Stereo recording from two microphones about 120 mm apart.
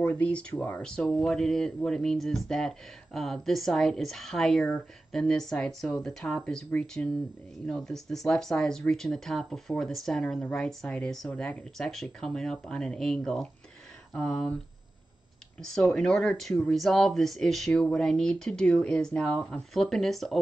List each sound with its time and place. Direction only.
0.0 s speech: 10° left (ahead or behind)
15.6 s speech: 5° left (ahead or behind)